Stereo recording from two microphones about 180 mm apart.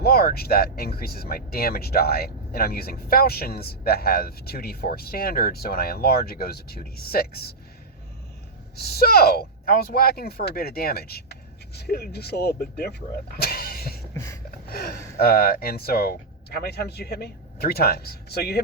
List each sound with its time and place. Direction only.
0.0 s speech: 60° left (ahead or behind)
8.7 s speech: 60° left (ahead or behind)
14.1 s a sound: 15° left (ahead or behind)
14.7 s speech: 60° left (ahead or behind)